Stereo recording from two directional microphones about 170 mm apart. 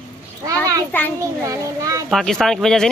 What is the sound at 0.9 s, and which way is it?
Speech, 10° left (ahead or behind).